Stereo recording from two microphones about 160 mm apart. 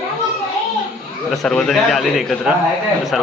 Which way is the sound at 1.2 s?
Centre (ahead or behind).